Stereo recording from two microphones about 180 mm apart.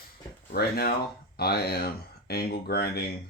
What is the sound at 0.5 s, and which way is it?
Speech, 60° left (ahead or behind).